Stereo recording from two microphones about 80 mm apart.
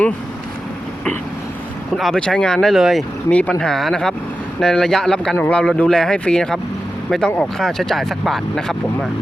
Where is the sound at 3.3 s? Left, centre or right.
Centre.